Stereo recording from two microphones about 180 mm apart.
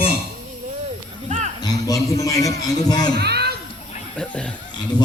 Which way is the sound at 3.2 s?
65° right (ahead or behind).